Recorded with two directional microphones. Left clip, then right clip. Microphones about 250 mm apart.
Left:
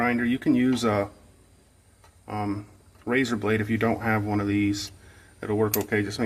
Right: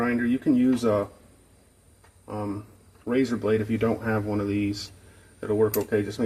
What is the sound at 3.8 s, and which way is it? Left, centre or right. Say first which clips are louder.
Speech: left 1 dB; left.